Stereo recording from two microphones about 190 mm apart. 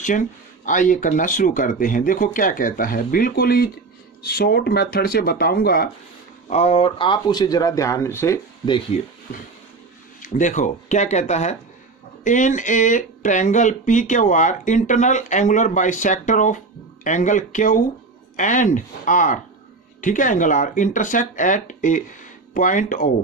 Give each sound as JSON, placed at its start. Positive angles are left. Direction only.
{"t": 0.7, "sound": "speech", "side_deg": 45}
{"t": 6.5, "sound": "speech", "side_deg": 30}
{"t": 8.9, "sound": "speech", "side_deg": 35}
{"t": 10.2, "sound": "speech", "side_deg": 40}